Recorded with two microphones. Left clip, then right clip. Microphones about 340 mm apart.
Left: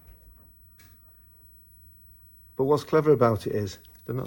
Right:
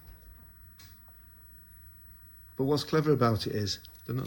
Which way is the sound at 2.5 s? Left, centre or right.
Centre.